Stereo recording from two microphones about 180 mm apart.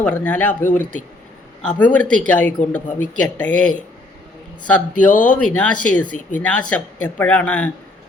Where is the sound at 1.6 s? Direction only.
10° left (ahead or behind).